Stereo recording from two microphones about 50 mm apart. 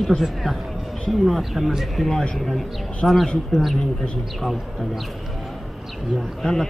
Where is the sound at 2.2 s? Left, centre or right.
Centre.